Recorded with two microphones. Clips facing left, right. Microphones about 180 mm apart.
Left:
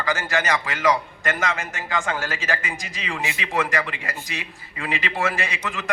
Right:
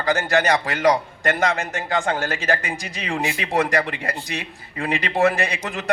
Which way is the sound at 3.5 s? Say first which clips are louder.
Right 4 dB; 40° right (ahead or behind).